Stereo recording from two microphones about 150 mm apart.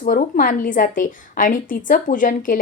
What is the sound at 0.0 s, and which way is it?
A woman's voice, 60° left (ahead or behind).